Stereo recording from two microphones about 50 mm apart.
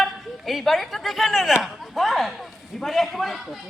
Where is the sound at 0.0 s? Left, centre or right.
Centre.